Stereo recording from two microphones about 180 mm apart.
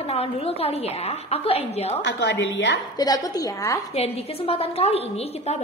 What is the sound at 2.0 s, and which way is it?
Speech, 70° left (ahead or behind).